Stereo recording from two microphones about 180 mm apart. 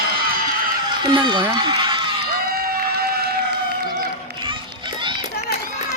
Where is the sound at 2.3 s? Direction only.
55° right (ahead or behind).